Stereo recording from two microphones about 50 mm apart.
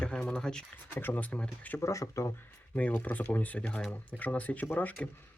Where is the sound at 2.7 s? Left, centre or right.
Left.